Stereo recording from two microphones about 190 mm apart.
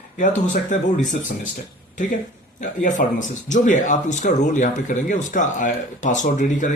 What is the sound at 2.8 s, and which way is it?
Speech, 40° left (ahead or behind).